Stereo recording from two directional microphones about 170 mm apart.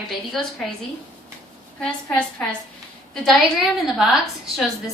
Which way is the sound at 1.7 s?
5° left (ahead or behind).